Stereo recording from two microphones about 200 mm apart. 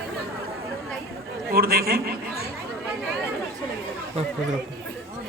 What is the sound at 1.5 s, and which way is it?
Speech, 50° right (ahead or behind).